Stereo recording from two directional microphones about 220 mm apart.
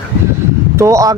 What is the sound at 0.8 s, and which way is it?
Speech, 15° right (ahead or behind).